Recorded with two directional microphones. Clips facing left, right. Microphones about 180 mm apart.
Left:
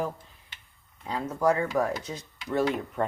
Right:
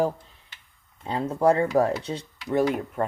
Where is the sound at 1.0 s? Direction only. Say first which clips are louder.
Right 4 dB; 30° right (ahead or behind).